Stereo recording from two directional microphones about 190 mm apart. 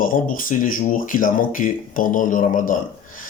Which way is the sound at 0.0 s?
45° left (ahead or behind).